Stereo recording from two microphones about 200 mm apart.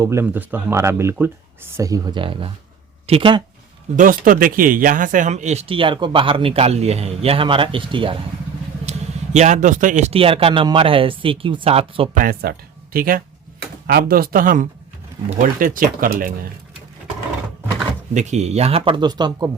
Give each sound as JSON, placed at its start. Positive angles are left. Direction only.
{"t": 0.0, "sound": "speech", "side_deg": -15}
{"t": 3.9, "sound": "speech", "side_deg": -45}
{"t": 8.9, "sound": "speech", "side_deg": -35}
{"t": 12.2, "sound": "speech", "side_deg": -50}
{"t": 18.1, "sound": "speech", "side_deg": -35}